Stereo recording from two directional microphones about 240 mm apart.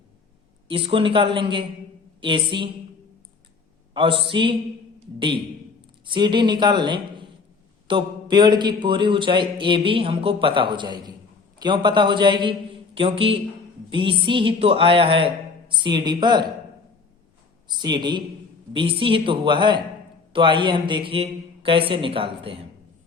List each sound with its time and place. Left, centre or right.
0.7 s a man's voice: right
3.9 s a man's voice: centre
6.1 s a man's voice: centre
17.7 s a man's voice: centre